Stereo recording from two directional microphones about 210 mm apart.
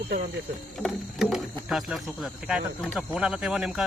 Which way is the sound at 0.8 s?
Centre (ahead or behind).